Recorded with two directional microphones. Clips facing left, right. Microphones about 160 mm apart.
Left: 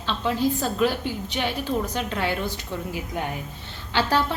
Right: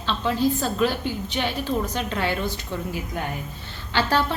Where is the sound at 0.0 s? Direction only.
15° left (ahead or behind).